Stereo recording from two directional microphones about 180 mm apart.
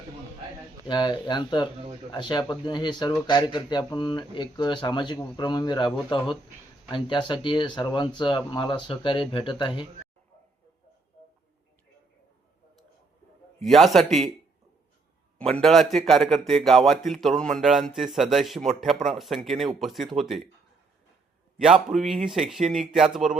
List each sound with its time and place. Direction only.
0.9 s speech: 25° left (ahead or behind)
6.9 s speech: 25° left (ahead or behind)
13.6 s a man's voice: centre (ahead or behind)
15.4 s a man's voice: 5° left (ahead or behind)
21.6 s a man's voice: centre (ahead or behind)